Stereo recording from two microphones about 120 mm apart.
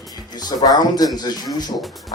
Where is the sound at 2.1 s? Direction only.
30° left (ahead or behind).